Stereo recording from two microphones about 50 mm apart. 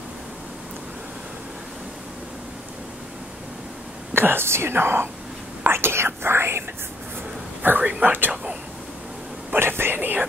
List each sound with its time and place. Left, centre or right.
4.1 s speech: right
5.7 s whispering: right
7.6 s speech: right
9.6 s speech: right